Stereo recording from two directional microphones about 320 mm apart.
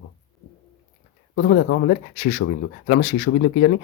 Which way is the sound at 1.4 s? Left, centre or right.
Left.